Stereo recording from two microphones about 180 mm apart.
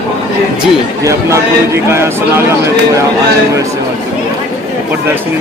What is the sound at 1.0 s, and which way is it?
A man's voice, 15° right (ahead or behind).